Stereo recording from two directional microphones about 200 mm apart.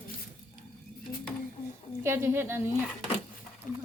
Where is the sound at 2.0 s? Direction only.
10° right (ahead or behind).